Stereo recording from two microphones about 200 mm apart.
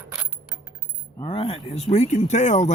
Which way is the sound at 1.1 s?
25° left (ahead or behind).